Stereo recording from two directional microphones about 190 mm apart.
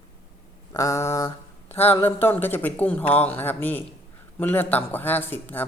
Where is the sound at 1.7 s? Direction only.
30° left (ahead or behind).